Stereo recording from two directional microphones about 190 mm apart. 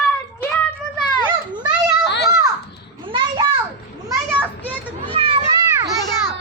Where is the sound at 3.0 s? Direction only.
25° right (ahead or behind).